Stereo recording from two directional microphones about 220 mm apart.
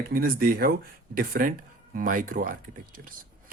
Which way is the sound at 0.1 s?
40° right (ahead or behind).